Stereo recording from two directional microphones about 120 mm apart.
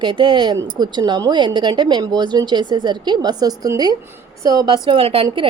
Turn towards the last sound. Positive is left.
turn(degrees=-45)  # may be behind; listen again after turning